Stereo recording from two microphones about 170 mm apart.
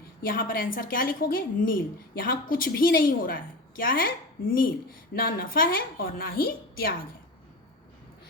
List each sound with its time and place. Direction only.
0.2 s a woman's voice: 55° left (ahead or behind)
5.1 s a woman's voice: 60° left (ahead or behind)